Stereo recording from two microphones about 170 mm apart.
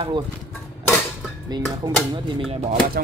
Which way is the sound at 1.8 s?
20° right (ahead or behind).